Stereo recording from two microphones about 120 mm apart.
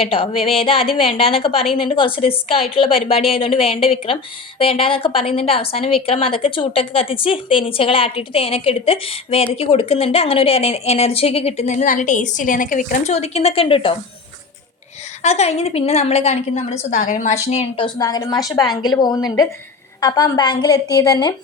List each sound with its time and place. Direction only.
0.0 s a woman's voice: 50° left (ahead or behind)
15.2 s a woman's voice: 65° left (ahead or behind)
17.8 s a woman's voice: 35° left (ahead or behind)